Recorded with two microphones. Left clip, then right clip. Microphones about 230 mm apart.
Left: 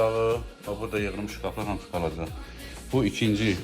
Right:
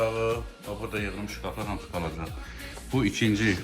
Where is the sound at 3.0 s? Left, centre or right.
Left.